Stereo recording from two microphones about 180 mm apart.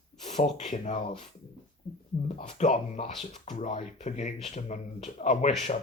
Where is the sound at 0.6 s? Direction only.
45° left (ahead or behind).